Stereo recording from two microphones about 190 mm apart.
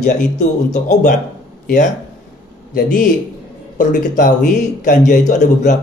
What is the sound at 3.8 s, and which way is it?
Speech, 40° left (ahead or behind).